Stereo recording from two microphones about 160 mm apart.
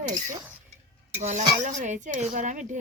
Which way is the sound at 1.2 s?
50° right (ahead or behind).